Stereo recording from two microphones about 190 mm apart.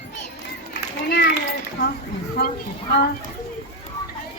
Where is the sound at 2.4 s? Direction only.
55° left (ahead or behind).